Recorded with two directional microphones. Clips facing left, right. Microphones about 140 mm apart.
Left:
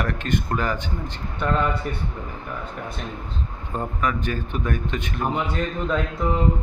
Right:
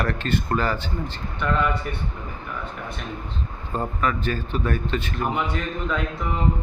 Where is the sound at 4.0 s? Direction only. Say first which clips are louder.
Even; 15° left (ahead or behind).